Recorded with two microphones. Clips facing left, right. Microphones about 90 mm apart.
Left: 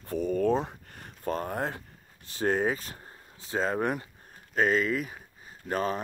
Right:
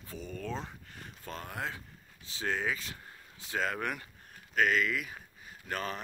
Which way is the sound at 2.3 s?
45° left (ahead or behind).